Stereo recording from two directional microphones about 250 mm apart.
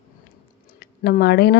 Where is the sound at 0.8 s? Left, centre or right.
Left.